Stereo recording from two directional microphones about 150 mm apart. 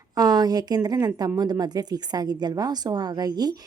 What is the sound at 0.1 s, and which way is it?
Speech, 25° right (ahead or behind).